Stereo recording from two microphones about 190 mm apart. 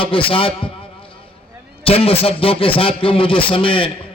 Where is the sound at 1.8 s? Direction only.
30° left (ahead or behind).